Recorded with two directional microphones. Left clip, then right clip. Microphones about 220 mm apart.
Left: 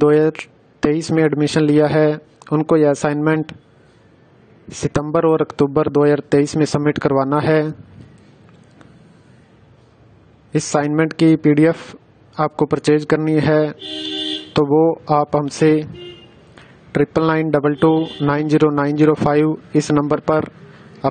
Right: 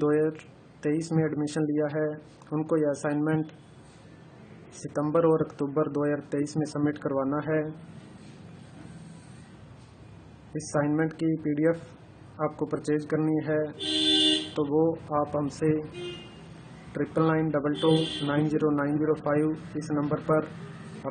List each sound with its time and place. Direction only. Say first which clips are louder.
0.0 s speech: left 12 dB; 45° left (ahead or behind)
5.0 s speech: left 7 dB; 40° left (ahead or behind)
10.5 s speech: left 10 dB; 45° left (ahead or behind)
16.9 s speech: left 10 dB; 45° left (ahead or behind)